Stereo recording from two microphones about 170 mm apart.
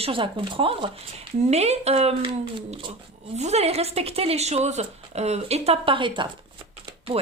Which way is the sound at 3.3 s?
40° right (ahead or behind).